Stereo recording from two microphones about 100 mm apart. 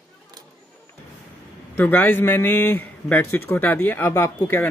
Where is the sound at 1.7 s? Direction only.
20° left (ahead or behind).